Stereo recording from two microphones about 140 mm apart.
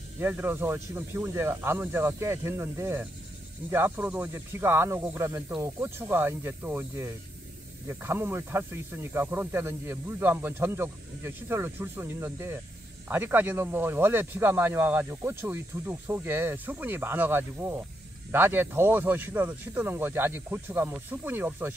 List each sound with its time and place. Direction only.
0.2 s speech: 15° right (ahead or behind)